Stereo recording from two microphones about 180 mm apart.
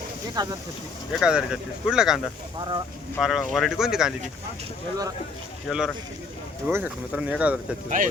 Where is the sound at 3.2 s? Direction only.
Centre (ahead or behind).